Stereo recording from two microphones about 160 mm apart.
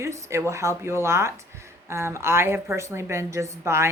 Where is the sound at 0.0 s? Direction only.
15° right (ahead or behind).